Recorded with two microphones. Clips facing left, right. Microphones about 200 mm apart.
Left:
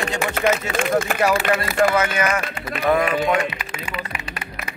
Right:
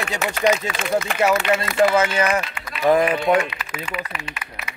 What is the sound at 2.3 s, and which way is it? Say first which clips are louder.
Run: even; 50° left (ahead or behind).